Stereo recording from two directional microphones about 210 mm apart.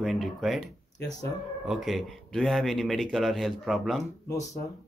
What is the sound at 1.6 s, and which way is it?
Speech, centre (ahead or behind).